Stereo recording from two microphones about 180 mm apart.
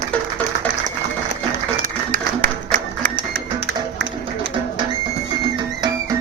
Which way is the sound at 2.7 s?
55° right (ahead or behind).